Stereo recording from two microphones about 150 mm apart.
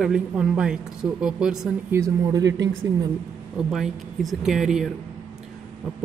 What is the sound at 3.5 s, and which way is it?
Speech, centre (ahead or behind).